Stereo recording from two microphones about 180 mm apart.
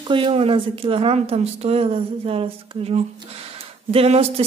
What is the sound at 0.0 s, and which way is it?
Speech, 30° right (ahead or behind).